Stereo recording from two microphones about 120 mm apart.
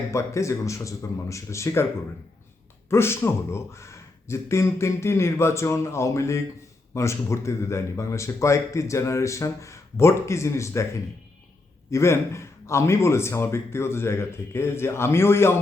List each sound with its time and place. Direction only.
0.1 s speech: 25° left (ahead or behind)
2.9 s speech: 20° left (ahead or behind)
11.9 s speech: 25° left (ahead or behind)